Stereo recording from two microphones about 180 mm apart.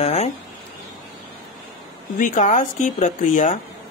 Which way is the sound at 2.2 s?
45° left (ahead or behind).